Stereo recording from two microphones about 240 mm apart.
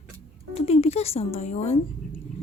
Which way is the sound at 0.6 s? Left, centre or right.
Left.